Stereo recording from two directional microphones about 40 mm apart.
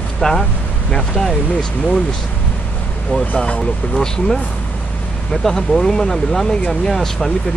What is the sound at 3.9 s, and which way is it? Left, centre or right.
Speech, centre.